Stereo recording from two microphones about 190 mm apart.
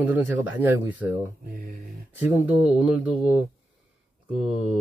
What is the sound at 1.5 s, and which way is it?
Mantra, 45° right (ahead or behind).